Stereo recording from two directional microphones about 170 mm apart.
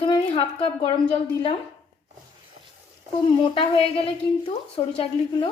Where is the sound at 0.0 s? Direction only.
30° left (ahead or behind).